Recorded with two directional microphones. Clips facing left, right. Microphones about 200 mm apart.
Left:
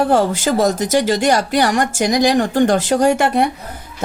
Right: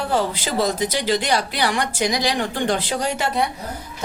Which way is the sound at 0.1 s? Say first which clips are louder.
Left 7 dB; 50° left (ahead or behind).